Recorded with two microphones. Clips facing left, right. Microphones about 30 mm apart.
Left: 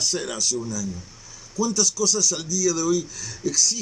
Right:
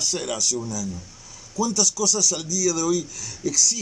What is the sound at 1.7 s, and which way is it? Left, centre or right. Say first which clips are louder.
Speech: even; centre.